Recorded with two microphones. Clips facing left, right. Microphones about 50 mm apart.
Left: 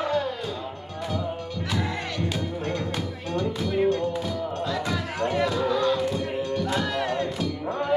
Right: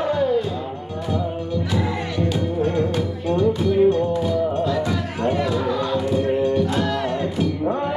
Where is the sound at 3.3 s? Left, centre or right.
Right.